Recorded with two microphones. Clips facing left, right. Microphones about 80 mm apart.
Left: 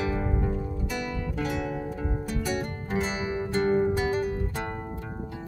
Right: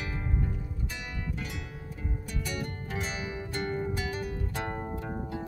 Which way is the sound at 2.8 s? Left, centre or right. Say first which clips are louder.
Left 6 dB; left.